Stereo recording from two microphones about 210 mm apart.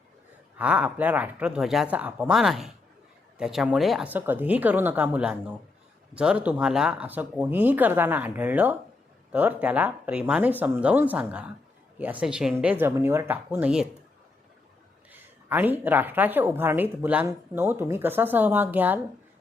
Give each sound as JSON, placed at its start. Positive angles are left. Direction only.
{"t": 0.6, "sound": "a woman's voice", "side_deg": -5}
{"t": 15.1, "sound": "a woman's voice", "side_deg": -10}